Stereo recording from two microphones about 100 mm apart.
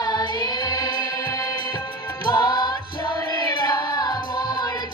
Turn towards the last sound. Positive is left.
turn(degrees=45)  # may be behind; listen again after turning